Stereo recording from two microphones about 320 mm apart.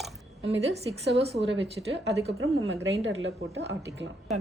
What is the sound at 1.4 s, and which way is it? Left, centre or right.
Speech, right.